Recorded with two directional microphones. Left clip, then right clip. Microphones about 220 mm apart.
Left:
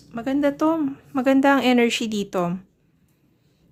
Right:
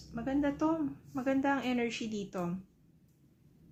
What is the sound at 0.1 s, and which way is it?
Speech, 50° left (ahead or behind).